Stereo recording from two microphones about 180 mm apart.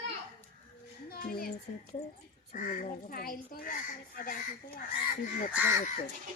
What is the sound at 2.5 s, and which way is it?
Speech, 45° left (ahead or behind).